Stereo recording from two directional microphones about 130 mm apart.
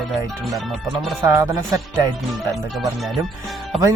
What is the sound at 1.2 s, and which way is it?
Speech, 25° right (ahead or behind).